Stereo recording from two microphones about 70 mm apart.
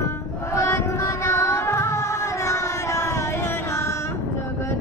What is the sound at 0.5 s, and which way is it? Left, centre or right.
Music, left.